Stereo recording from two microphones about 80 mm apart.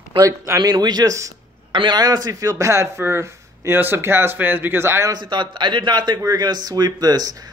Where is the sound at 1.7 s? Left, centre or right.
Right.